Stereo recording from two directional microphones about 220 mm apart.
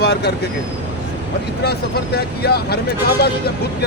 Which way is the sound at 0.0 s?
45° left (ahead or behind).